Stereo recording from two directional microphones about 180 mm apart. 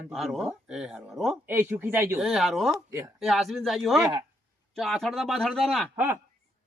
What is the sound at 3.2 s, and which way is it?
Speech, centre (ahead or behind).